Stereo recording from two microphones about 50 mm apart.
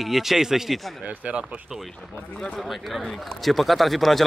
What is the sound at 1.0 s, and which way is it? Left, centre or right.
Speech, right.